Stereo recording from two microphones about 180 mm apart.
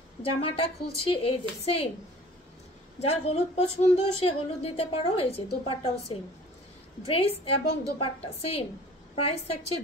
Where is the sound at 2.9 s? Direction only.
35° left (ahead or behind).